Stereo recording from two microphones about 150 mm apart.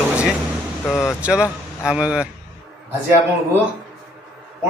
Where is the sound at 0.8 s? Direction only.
15° left (ahead or behind).